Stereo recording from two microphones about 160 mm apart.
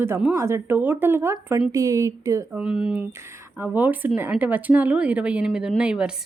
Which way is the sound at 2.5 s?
5° right (ahead or behind).